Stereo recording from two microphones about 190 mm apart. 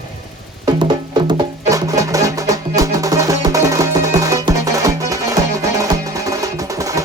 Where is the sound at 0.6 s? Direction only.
25° right (ahead or behind).